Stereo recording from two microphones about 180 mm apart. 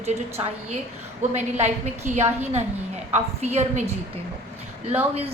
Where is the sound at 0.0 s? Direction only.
35° right (ahead or behind).